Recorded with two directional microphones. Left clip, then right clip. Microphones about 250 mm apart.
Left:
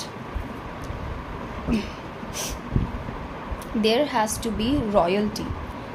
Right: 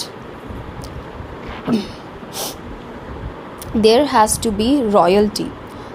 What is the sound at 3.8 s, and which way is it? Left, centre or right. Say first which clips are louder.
A woman's voice: right 9 dB; right.